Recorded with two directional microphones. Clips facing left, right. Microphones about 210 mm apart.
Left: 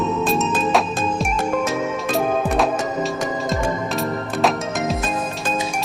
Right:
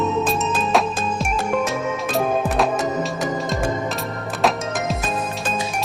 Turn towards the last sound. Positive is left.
turn(degrees=0)  # may be behind; listen again after turning